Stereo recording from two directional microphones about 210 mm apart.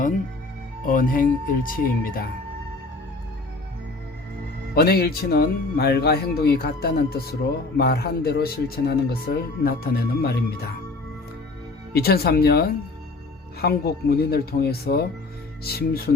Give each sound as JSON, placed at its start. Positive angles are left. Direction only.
{"t": 0.9, "sound": "speech", "side_deg": 40}
{"t": 4.7, "sound": "speech", "side_deg": 45}
{"t": 11.9, "sound": "speech", "side_deg": 50}